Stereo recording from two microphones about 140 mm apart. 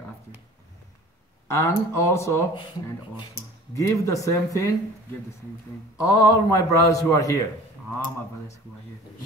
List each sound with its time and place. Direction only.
1.5 s a man's voice: 20° left (ahead or behind)
5.9 s a man's voice: 25° left (ahead or behind)